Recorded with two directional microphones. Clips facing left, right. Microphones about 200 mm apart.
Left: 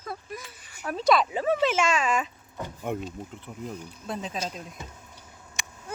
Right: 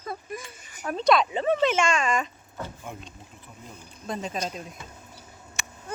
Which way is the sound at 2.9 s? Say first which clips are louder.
Left 9 dB; 65° left (ahead or behind).